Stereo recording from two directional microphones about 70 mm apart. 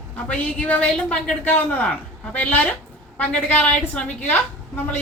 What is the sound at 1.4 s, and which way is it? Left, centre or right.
A woman's voice, left.